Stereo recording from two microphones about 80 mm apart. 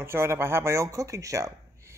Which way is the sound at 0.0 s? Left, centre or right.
Right.